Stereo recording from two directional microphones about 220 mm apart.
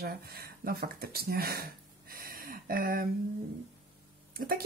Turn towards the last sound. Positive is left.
turn(degrees=-40)  # may be behind; listen again after turning